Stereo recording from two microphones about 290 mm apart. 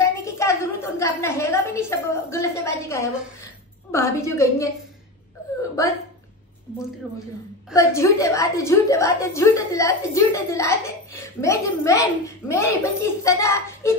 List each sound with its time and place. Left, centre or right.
0.0 s a woman's voice: centre
7.7 s a woman's voice: centre